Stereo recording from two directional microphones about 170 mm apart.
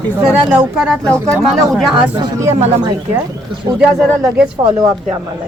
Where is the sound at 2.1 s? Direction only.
25° right (ahead or behind).